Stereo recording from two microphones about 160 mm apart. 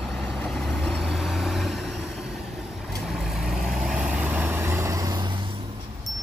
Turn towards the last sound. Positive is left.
turn(degrees=-25)  # may be behind; listen again after turning